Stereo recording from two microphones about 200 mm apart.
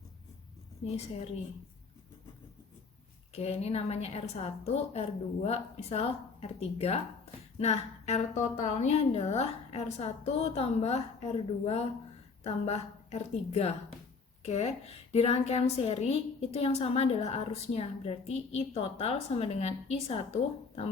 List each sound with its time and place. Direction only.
3.3 s a woman's voice: 30° left (ahead or behind)